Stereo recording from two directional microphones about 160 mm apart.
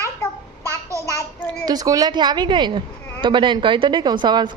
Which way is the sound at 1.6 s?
25° right (ahead or behind).